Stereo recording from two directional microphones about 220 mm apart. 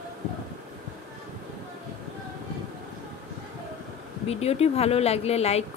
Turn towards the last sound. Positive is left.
turn(degrees=30)  # may be behind; listen again after turning